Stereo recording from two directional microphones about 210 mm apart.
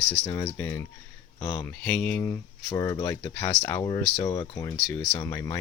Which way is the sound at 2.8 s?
15° left (ahead or behind).